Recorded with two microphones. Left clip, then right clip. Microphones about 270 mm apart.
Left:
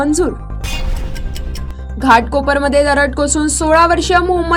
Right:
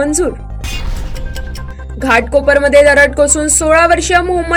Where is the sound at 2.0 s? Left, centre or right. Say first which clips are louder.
Even; left.